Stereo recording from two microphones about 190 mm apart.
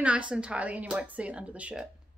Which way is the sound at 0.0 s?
5° right (ahead or behind).